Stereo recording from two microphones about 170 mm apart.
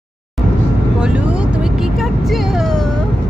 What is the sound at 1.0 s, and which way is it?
Vehicle, 5° right (ahead or behind).